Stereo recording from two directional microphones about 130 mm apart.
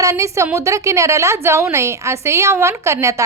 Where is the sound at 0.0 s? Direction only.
25° right (ahead or behind).